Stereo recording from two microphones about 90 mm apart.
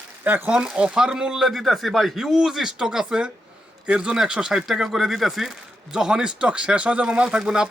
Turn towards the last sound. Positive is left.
turn(degrees=-10)  # may be behind; listen again after turning